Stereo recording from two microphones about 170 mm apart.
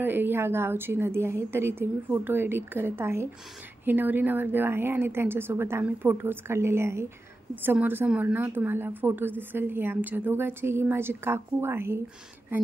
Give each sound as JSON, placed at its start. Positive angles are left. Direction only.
{"t": 0.0, "sound": "a woman's voice", "side_deg": -10}